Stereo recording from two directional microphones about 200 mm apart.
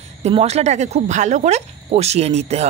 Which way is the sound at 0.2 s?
30° right (ahead or behind).